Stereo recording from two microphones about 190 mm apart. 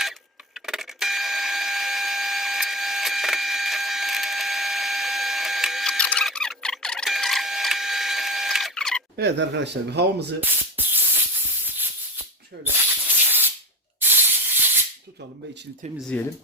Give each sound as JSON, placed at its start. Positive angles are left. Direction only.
{"t": 0.6, "sound": "alarm clock", "side_deg": -5}
{"t": 9.1, "sound": "speech", "side_deg": -65}
{"t": 10.4, "sound": "spray", "side_deg": -10}
{"t": 13.1, "sound": "spray", "side_deg": -10}
{"t": 16.0, "sound": "speech", "side_deg": 5}